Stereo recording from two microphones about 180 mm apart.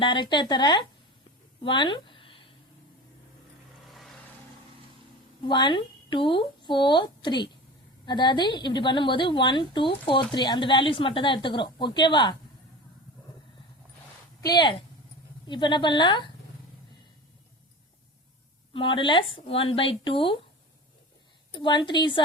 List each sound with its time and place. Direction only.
0.0 s a woman's voice: 25° left (ahead or behind)
1.6 s a sound: 25° left (ahead or behind)
5.5 s a woman's voice: 25° left (ahead or behind)
14.4 s a woman's voice: 25° left (ahead or behind)
18.7 s a woman's voice: 30° left (ahead or behind)
21.5 s a woman's voice: 25° left (ahead or behind)